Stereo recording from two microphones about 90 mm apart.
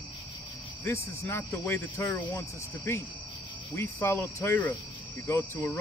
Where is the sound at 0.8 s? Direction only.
25° left (ahead or behind).